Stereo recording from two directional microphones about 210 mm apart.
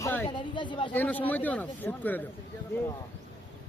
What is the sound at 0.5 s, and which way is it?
Speech, 20° left (ahead or behind).